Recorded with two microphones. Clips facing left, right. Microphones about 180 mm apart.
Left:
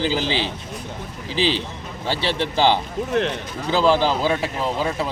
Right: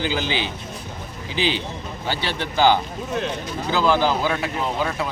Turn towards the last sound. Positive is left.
turn(degrees=30)  # may be behind; listen again after turning